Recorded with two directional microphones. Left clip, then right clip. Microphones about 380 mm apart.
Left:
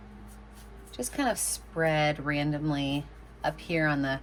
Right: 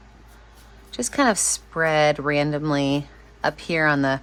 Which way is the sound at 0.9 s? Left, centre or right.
Centre.